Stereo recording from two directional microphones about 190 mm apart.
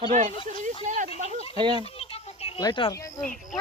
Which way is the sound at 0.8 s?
40° right (ahead or behind).